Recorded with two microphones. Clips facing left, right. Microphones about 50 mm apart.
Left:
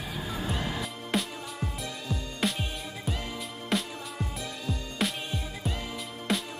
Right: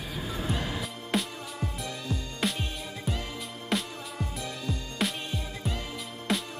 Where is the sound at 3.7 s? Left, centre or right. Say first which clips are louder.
Even; centre.